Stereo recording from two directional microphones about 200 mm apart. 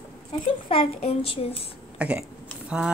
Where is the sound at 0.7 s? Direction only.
30° left (ahead or behind).